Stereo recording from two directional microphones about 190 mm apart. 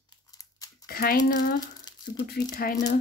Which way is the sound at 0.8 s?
50° left (ahead or behind).